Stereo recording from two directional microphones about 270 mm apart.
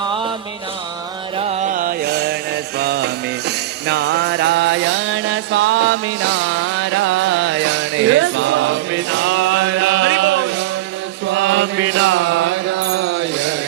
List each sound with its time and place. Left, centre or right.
1.4 s music: right
11.3 s mantra: right